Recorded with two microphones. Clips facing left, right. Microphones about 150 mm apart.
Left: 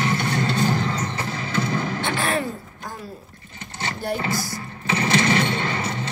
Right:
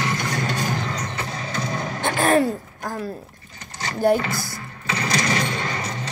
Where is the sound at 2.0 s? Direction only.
45° right (ahead or behind).